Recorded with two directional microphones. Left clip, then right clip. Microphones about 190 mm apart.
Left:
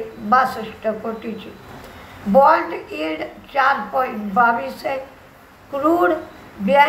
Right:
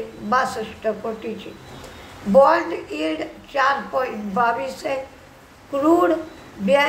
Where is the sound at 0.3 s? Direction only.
15° right (ahead or behind).